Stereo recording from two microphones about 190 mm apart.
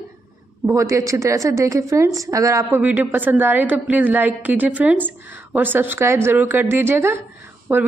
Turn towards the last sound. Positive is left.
turn(degrees=-10)  # may be behind; listen again after turning